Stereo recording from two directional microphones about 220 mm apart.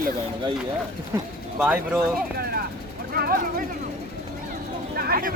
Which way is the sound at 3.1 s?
45° right (ahead or behind).